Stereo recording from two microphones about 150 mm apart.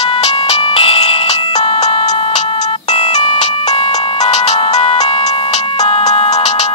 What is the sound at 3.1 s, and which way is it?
Music, 30° left (ahead or behind).